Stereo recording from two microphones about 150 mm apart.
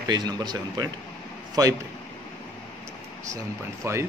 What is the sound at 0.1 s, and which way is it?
Speech, 30° right (ahead or behind).